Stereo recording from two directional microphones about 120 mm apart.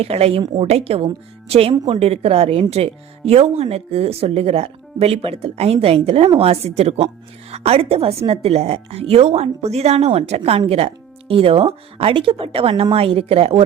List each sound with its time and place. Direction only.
0.0 s a woman's voice: 55° right (ahead or behind)